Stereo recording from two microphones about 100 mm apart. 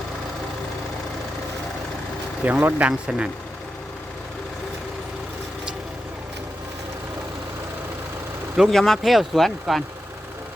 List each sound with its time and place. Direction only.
2.4 s speech: 20° right (ahead or behind)
8.5 s speech: centre (ahead or behind)